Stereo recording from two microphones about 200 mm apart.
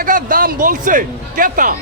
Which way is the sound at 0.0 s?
45° right (ahead or behind).